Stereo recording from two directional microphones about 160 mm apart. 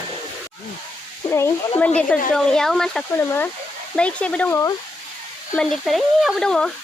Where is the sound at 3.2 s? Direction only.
15° left (ahead or behind).